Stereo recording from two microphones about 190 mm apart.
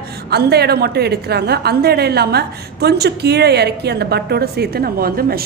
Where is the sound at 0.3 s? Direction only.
60° right (ahead or behind).